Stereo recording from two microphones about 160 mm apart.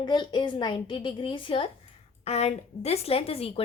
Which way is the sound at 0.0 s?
25° left (ahead or behind).